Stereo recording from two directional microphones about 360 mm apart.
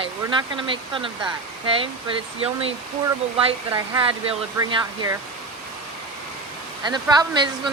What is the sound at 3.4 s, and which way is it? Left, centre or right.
Speech, centre.